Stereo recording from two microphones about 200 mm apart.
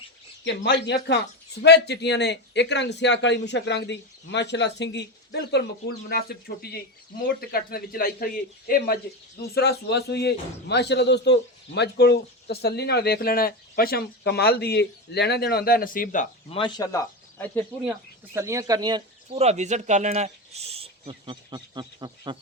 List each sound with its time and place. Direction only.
0.4 s a man's voice: 60° left (ahead or behind); by 16.2 s 45° left (ahead or behind)
16.5 s speech: 25° left (ahead or behind); by 17.7 s 10° left (ahead or behind)
18.3 s speech: 15° right (ahead or behind)
19.4 s speech: 35° right (ahead or behind)